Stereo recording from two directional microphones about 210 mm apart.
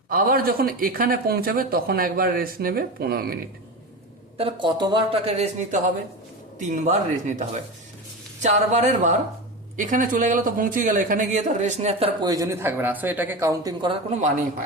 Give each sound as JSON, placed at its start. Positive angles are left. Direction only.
{"t": 0.1, "sound": "speech", "side_deg": -45}
{"t": 4.4, "sound": "a man's voice", "side_deg": -25}